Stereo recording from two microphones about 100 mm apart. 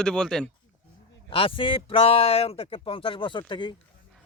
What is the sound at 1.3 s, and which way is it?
Speech, 60° left (ahead or behind).